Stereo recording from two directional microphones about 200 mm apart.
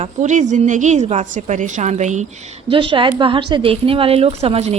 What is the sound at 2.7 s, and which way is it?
A woman's voice, 25° right (ahead or behind).